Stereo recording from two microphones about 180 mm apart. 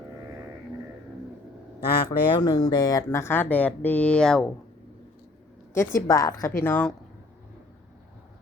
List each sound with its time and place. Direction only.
2.0 s speech: 20° left (ahead or behind); by 4.5 s 5° left (ahead or behind)
5.7 s speech: 15° left (ahead or behind)